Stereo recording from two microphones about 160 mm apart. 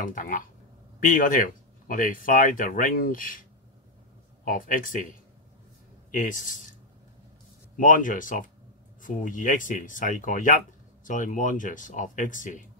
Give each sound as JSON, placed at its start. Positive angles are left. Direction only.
{"t": 0.0, "sound": "speech", "side_deg": 55}
{"t": 4.5, "sound": "speech", "side_deg": 55}
{"t": 6.1, "sound": "speech", "side_deg": 55}
{"t": 7.7, "sound": "speech", "side_deg": 55}